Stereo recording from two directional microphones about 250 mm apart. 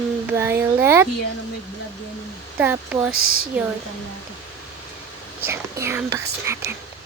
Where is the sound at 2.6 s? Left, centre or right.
Centre.